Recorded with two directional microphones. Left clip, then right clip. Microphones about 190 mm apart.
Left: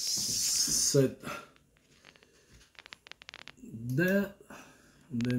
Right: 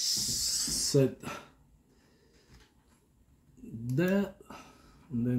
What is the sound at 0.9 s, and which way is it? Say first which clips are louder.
Speech: right 4 dB; centre (ahead or behind).